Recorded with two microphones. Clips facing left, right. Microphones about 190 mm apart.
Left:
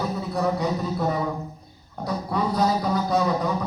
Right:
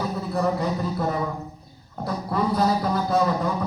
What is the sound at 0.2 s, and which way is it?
Speech, centre (ahead or behind).